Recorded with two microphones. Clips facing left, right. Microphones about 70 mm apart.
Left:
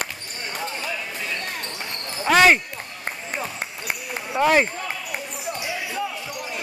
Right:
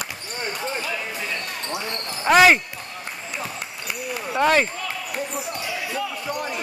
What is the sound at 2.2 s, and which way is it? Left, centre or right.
Speech, centre.